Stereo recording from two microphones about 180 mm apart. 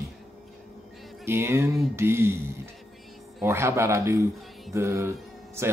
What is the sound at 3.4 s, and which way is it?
Speech, 15° right (ahead or behind).